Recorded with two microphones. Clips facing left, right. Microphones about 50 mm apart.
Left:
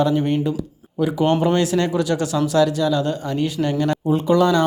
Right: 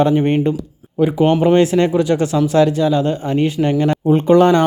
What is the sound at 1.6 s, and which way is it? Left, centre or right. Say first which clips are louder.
Speech: right 5 dB; right.